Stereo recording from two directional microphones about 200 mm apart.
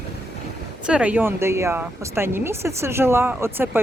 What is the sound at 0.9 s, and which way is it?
Speech, 5° right (ahead or behind).